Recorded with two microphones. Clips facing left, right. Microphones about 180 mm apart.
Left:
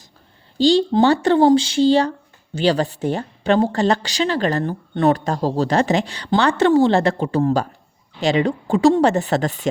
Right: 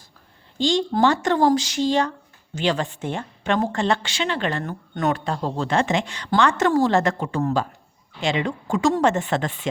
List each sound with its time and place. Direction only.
0.6 s speech: 35° left (ahead or behind)